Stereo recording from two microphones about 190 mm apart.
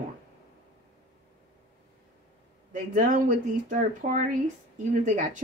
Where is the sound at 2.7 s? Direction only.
45° right (ahead or behind).